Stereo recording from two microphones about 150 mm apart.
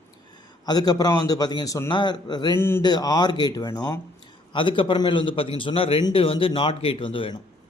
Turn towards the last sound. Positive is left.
turn(degrees=35)  # may be behind; listen again after turning